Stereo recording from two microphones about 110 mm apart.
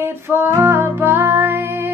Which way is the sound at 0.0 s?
20° right (ahead or behind).